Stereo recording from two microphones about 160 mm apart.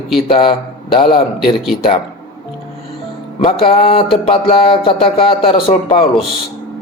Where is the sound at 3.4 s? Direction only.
35° left (ahead or behind).